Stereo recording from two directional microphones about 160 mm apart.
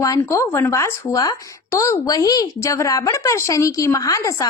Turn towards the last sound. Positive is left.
turn(degrees=20)  # may be behind; listen again after turning